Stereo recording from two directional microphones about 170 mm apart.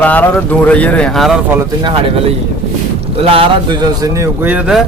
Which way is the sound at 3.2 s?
35° right (ahead or behind).